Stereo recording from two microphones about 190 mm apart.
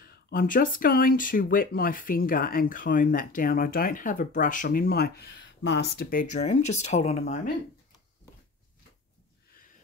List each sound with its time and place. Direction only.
0.0 s speech: 50° left (ahead or behind)